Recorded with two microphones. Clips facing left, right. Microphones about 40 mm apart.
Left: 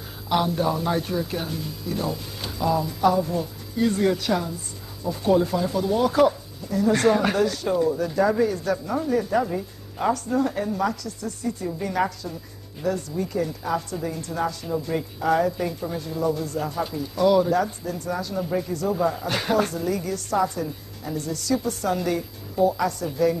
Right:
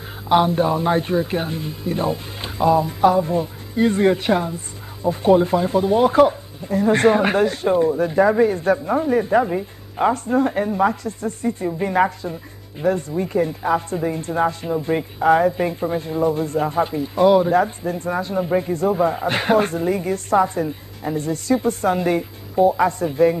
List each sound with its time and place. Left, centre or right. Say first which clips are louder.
0.3 s speech: right 6 dB; right